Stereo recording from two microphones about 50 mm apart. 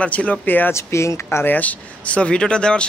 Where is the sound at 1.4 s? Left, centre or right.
Left; by 2.9 s centre.